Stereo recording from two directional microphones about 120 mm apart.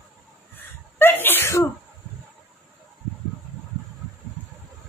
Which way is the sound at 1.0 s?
15° left (ahead or behind).